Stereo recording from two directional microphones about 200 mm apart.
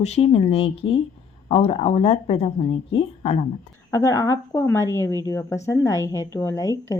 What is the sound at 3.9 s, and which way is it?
A woman's voice, 15° left (ahead or behind).